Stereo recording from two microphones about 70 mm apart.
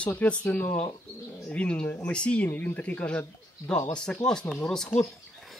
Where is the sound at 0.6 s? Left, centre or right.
Left.